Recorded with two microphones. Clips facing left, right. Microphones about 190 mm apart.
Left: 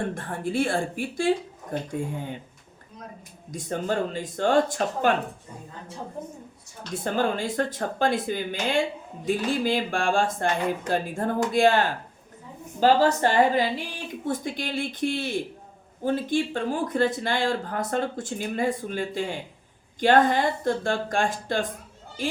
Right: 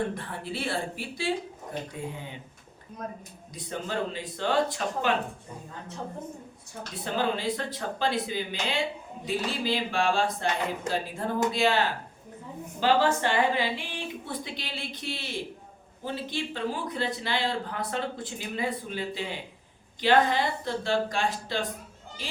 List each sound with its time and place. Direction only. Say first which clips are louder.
0.1 s speech: left 6 dB; 50° left (ahead or behind)
3.5 s speech: left 6 dB; 45° left (ahead or behind)
6.9 s a woman's voice: left 4 dB; 50° left (ahead or behind)